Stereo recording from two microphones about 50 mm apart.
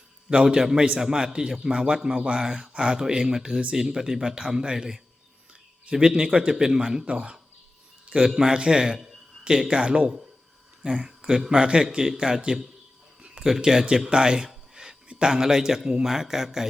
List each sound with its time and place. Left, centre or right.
0.3 s a man's voice: centre
5.9 s a man's voice: centre
13.2 s a sound: centre
13.6 s a man's voice: centre